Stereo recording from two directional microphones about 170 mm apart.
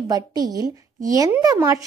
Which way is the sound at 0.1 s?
20° right (ahead or behind).